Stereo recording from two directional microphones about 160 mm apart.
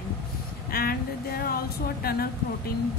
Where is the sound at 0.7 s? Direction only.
70° left (ahead or behind).